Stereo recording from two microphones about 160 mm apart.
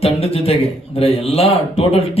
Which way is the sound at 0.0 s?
40° left (ahead or behind).